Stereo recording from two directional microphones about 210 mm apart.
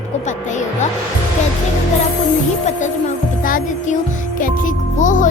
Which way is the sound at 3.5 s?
40° left (ahead or behind).